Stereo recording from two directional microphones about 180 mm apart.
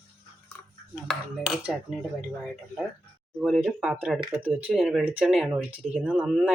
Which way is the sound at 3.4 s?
Centre (ahead or behind).